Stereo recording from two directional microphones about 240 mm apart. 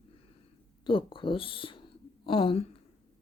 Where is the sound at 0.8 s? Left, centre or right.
Left.